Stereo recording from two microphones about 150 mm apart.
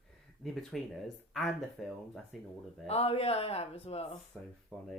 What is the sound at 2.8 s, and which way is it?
Speech, 40° left (ahead or behind).